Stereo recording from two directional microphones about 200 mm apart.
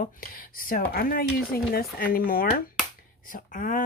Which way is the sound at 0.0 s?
45° left (ahead or behind).